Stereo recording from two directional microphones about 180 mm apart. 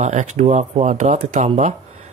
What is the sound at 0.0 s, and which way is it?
Speech, 40° right (ahead or behind).